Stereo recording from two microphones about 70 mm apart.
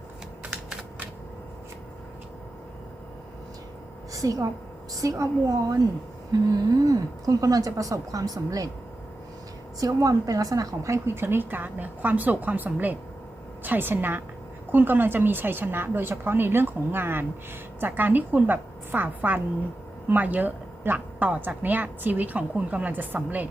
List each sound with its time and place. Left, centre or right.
4.1 s a woman's voice: right
6.5 s a woman's voice: right
9.8 s a woman's voice: right
11.0 s a woman's voice: right